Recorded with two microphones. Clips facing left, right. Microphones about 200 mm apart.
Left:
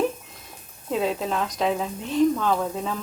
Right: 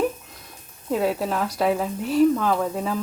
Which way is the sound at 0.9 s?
5° right (ahead or behind).